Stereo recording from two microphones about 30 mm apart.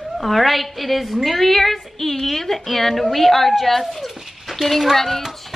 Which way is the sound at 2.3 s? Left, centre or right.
Centre.